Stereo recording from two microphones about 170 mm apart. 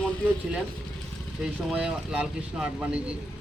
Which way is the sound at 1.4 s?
5° right (ahead or behind).